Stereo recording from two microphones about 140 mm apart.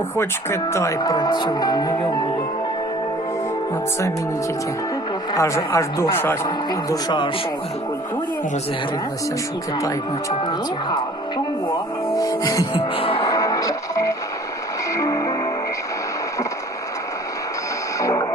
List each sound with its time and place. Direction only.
0.2 s speech: 20° left (ahead or behind)
5.3 s speech: 20° left (ahead or behind)
6.7 s speech: 30° left (ahead or behind)
12.1 s music: 25° left (ahead or behind)
12.7 s speech: 40° left (ahead or behind)
13.2 s music: 25° left (ahead or behind)
18.0 s music: 25° left (ahead or behind)